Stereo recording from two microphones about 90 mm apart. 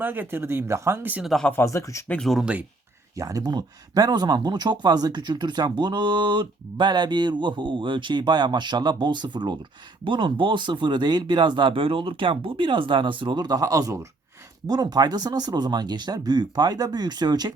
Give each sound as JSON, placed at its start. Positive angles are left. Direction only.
{"t": 0.0, "sound": "speech", "side_deg": -20}
{"t": 1.2, "sound": "speech", "side_deg": 0}
{"t": 1.6, "sound": "speech", "side_deg": 35}
{"t": 2.4, "sound": "speech", "side_deg": -15}
{"t": 3.2, "sound": "speech", "side_deg": -40}
{"t": 14.7, "sound": "speech", "side_deg": -50}